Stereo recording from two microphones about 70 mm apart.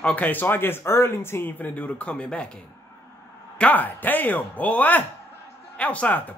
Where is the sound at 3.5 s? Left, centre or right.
Left.